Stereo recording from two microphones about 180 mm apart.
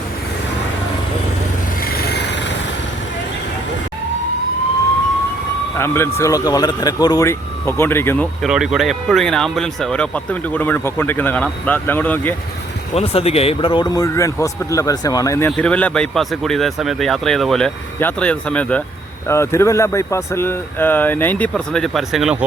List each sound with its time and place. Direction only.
2.0 s a sound: 65° left (ahead or behind)
5.7 s vehicle: 15° left (ahead or behind)
6.1 s speech: 20° left (ahead or behind)
8.4 s speech: 5° right (ahead or behind)
12.9 s speech: 35° left (ahead or behind); by 22.4 s 5° right (ahead or behind)